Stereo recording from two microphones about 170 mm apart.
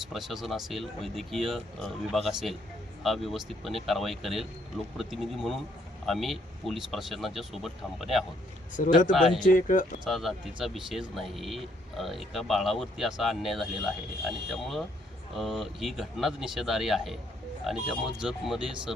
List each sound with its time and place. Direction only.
0.1 s speech: centre (ahead or behind)
8.8 s speech: 50° left (ahead or behind)
9.1 s speech: centre (ahead or behind)
9.5 s speech: 50° left (ahead or behind)
10.0 s speech: centre (ahead or behind)